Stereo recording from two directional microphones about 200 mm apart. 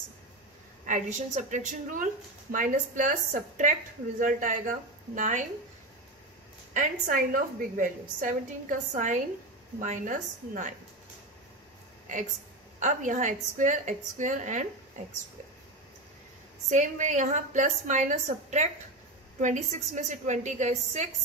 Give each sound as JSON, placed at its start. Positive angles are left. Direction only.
{"t": 0.8, "sound": "a woman's voice", "side_deg": -40}
{"t": 6.7, "sound": "a woman's voice", "side_deg": -40}
{"t": 12.8, "sound": "a woman's voice", "side_deg": -40}
{"t": 16.7, "sound": "a woman's voice", "side_deg": -40}